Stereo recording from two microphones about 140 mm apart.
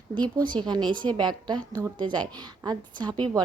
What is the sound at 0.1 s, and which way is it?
A woman's voice, 30° right (ahead or behind).